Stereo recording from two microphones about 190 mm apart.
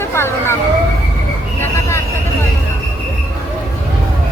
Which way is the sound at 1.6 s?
15° left (ahead or behind).